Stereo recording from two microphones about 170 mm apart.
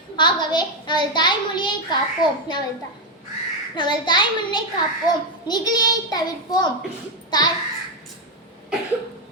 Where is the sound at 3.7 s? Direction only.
25° left (ahead or behind).